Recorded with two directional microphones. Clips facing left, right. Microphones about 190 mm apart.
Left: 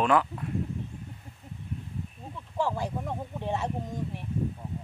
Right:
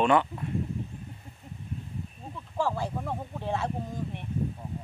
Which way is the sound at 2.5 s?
20° left (ahead or behind).